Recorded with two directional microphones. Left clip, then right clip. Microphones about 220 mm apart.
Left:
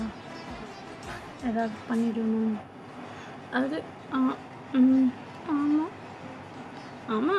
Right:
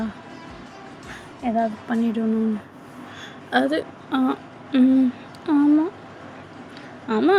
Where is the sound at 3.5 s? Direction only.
30° right (ahead or behind).